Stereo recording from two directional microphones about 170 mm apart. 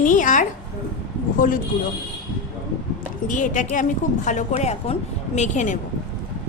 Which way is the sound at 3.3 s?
50° left (ahead or behind).